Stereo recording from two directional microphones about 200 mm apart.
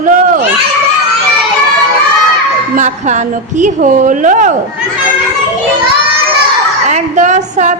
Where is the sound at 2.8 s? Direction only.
40° right (ahead or behind).